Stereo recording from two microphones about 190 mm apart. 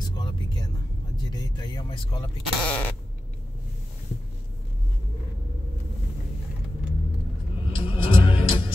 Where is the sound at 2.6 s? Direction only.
5° left (ahead or behind).